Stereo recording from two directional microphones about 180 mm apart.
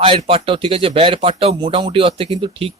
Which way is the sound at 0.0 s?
30° right (ahead or behind).